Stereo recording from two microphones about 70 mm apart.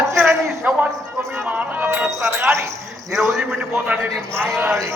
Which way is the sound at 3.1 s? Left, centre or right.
Centre.